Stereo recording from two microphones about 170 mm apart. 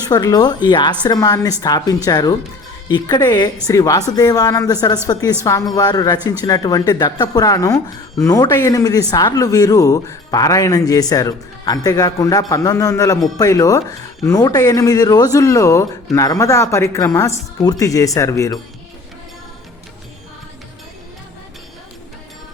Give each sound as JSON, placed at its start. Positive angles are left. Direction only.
{"t": 0.1, "sound": "speech", "side_deg": 25}